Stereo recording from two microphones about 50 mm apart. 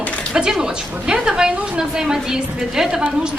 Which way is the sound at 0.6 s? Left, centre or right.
Centre.